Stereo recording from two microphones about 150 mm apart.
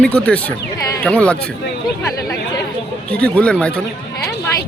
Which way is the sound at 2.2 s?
20° left (ahead or behind).